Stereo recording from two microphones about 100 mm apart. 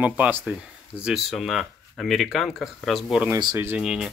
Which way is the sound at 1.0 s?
5° right (ahead or behind).